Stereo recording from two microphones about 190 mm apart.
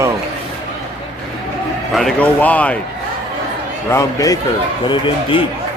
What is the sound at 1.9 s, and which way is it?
Speech, centre (ahead or behind).